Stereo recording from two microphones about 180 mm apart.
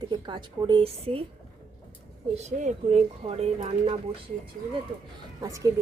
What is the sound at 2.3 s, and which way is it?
Speech, 40° right (ahead or behind).